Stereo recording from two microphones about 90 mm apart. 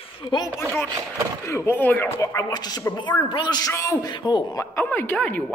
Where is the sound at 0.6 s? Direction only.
20° left (ahead or behind).